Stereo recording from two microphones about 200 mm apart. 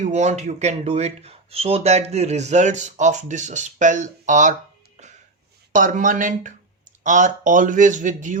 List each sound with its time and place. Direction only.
0.0 s speech: 35° right (ahead or behind)
5.7 s speech: 40° right (ahead or behind)